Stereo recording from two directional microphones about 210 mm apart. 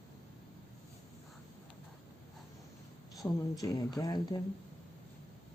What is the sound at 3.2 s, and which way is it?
Speech, 15° left (ahead or behind).